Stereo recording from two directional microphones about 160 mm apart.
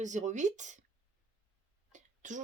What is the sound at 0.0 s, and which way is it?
Speech, 50° right (ahead or behind).